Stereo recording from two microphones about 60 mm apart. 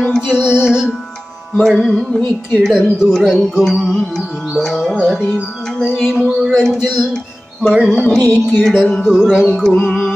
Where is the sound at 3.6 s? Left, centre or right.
Centre.